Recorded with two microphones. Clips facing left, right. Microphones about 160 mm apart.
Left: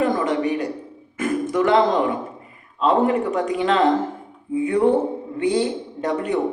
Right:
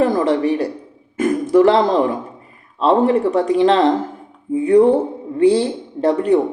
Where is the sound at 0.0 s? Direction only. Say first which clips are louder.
Right 5 dB; 35° right (ahead or behind).